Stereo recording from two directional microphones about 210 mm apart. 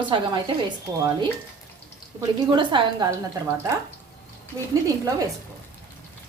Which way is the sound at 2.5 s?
20° right (ahead or behind).